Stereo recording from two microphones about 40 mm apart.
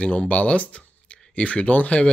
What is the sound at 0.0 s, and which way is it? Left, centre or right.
Speech, left.